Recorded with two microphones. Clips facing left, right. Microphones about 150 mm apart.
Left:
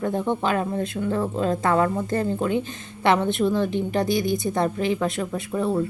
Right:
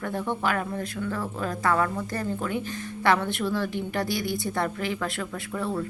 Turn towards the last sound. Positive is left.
turn(degrees=20)  # may be behind; listen again after turning